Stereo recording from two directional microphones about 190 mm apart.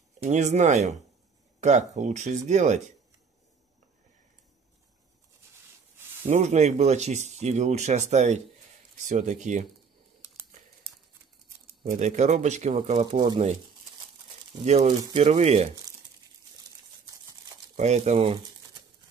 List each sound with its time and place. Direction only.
0.2 s speech: 35° right (ahead or behind)
6.2 s speech: 35° right (ahead or behind)
11.8 s speech: 40° right (ahead or behind)
14.6 s speech: 35° right (ahead or behind)
17.0 s a sound: 20° right (ahead or behind)
17.7 s speech: 35° right (ahead or behind)